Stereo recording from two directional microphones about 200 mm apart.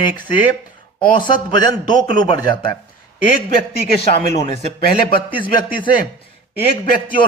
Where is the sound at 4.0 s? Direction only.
30° left (ahead or behind).